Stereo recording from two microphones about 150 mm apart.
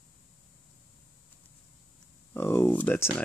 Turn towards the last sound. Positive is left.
turn(degrees=10)  # may be behind; listen again after turning